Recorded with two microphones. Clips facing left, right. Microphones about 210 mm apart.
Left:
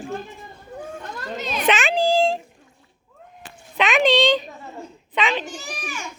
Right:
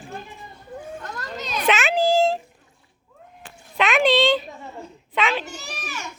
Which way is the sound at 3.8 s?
Centre (ahead or behind).